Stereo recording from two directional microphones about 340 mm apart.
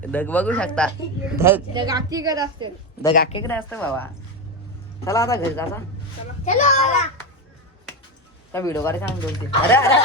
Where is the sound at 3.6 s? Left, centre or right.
Centre.